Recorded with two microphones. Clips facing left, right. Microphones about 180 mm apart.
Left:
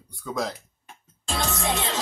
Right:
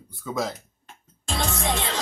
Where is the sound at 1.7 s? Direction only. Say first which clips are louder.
Even; 20° left (ahead or behind).